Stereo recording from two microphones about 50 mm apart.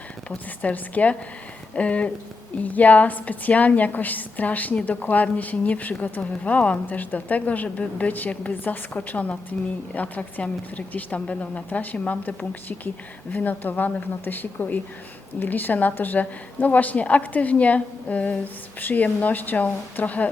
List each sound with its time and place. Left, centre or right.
0.3 s a woman's voice: left